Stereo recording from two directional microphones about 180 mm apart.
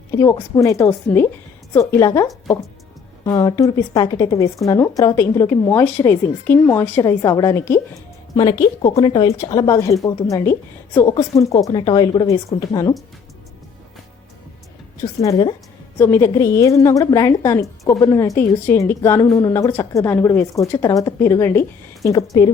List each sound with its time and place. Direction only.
0.1 s a woman's voice: 15° left (ahead or behind)
8.4 s a woman's voice: 25° left (ahead or behind)
16.0 s a woman's voice: 15° left (ahead or behind)